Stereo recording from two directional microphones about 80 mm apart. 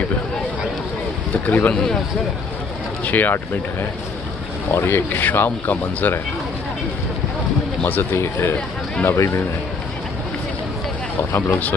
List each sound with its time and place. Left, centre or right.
1.4 s speech: left
3.1 s speech: left
4.6 s speech: left
7.8 s speech: left
11.3 s speech: left